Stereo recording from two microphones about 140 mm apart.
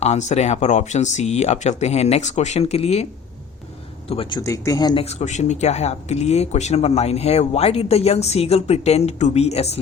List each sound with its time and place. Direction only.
0.0 s speech: 55° left (ahead or behind)
4.1 s speech: 40° left (ahead or behind)
4.4 s speech: 25° left (ahead or behind)
4.9 s speech: 50° left (ahead or behind)